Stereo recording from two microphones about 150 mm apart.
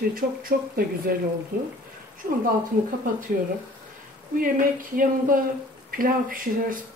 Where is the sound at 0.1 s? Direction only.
75° right (ahead or behind).